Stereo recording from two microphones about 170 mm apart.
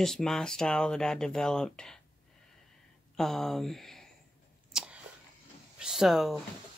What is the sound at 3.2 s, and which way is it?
Speech, centre (ahead or behind).